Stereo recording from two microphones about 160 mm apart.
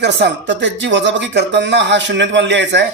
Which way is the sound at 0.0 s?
90° right.